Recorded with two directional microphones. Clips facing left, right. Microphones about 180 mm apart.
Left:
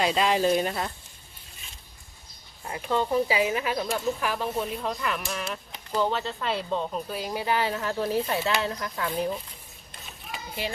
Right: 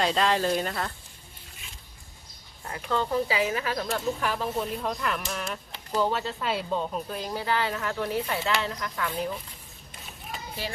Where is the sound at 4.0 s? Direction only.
Centre (ahead or behind); by 9.3 s 25° left (ahead or behind).